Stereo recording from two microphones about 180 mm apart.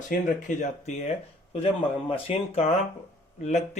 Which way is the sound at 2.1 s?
35° left (ahead or behind).